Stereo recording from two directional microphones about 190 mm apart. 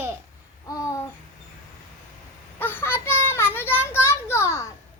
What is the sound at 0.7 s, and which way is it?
Babbling, 15° left (ahead or behind).